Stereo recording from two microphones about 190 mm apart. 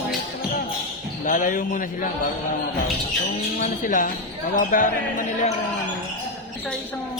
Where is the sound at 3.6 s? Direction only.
45° left (ahead or behind).